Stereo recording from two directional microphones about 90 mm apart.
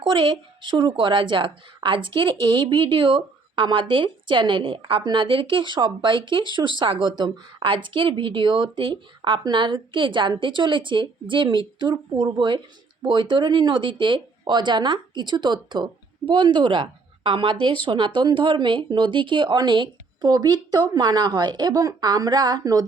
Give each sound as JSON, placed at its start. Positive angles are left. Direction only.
{"t": 0.0, "sound": "a woman's voice", "side_deg": -65}
{"t": 9.4, "sound": "a woman's voice", "side_deg": -60}